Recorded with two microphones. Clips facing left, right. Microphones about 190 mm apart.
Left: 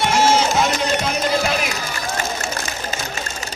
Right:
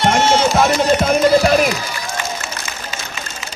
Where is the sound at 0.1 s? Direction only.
55° right (ahead or behind).